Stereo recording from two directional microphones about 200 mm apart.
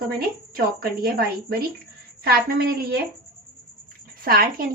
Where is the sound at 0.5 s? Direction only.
50° right (ahead or behind).